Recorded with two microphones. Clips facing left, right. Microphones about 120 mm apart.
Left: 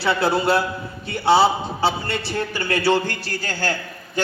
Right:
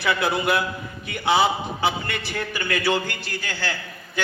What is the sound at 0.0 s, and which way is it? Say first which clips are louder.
A man's voice: left 3 dB; 30° left (ahead or behind).